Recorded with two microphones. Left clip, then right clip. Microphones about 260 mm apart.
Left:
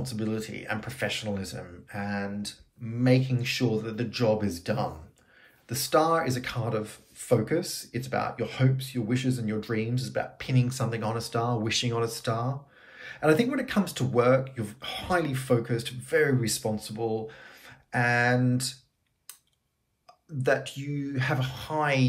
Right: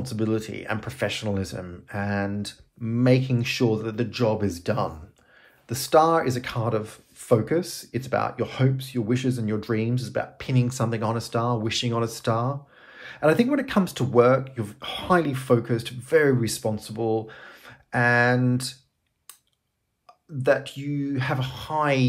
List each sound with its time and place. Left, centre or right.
0.0 s speech: centre
20.4 s speech: centre